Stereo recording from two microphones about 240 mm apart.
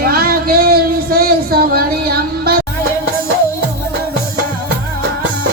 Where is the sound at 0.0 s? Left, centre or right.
Right.